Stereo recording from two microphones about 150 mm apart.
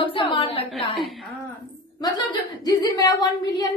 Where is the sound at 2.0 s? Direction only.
25° left (ahead or behind).